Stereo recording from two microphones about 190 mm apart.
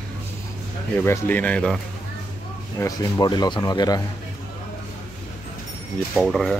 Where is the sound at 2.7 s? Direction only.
20° left (ahead or behind).